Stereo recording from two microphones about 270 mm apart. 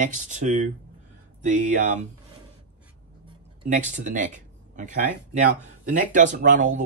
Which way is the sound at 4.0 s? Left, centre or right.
Right.